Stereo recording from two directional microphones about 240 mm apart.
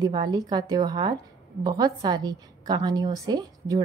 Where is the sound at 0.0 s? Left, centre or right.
Centre.